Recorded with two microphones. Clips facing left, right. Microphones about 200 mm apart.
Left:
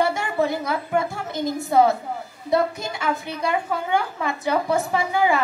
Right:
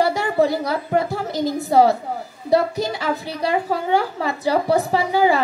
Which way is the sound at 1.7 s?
35° right (ahead or behind).